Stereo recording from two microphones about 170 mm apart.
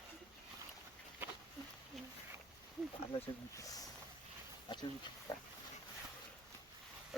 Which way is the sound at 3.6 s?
20° left (ahead or behind).